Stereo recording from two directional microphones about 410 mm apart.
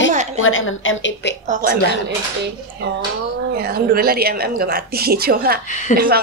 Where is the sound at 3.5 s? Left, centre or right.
Right.